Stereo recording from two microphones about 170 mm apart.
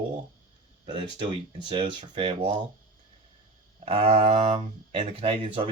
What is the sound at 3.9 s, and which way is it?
Speech, 35° right (ahead or behind).